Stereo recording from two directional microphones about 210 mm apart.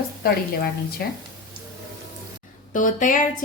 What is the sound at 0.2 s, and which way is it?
Speech, 45° left (ahead or behind).